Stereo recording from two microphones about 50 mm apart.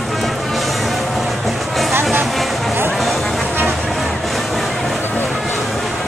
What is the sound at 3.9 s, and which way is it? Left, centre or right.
Vehicle, centre.